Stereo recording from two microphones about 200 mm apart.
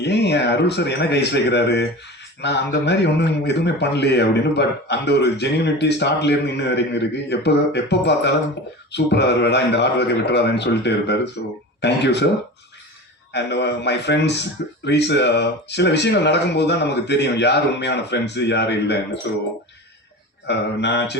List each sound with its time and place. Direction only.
0.0 s a man's voice: 60° left (ahead or behind)
13.3 s a man's voice: 60° left (ahead or behind)
20.5 s a man's voice: 60° left (ahead or behind)